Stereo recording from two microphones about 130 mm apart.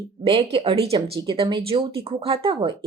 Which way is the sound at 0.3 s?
45° right (ahead or behind).